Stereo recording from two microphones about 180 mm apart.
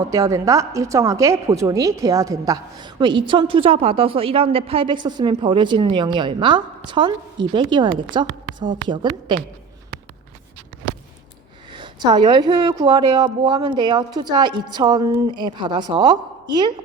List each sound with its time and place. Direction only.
0.1 s a woman's voice: 20° right (ahead or behind)
11.7 s a woman's voice: 25° right (ahead or behind)